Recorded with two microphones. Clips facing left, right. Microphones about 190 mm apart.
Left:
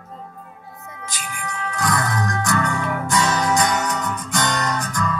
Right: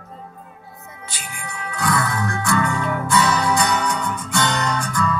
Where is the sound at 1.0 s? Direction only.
45° left (ahead or behind).